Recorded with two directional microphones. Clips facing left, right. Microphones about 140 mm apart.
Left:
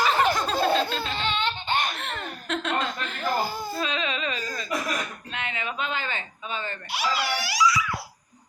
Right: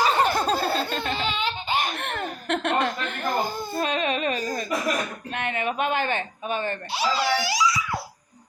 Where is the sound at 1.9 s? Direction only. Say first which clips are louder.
Right 4 dB; 55° right (ahead or behind).